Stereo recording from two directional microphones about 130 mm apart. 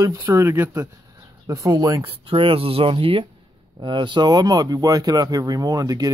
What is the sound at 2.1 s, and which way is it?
Speech, 45° right (ahead or behind).